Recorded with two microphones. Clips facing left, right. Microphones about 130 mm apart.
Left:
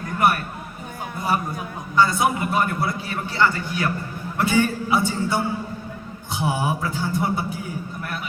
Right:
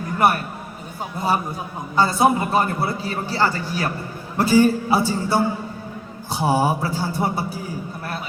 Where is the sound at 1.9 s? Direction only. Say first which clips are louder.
Right 2 dB; 30° right (ahead or behind).